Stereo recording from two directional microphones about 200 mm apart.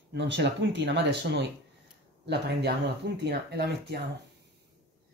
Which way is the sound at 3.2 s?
55° right (ahead or behind).